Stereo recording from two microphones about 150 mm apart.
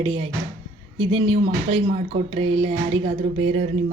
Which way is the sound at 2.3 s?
40° right (ahead or behind).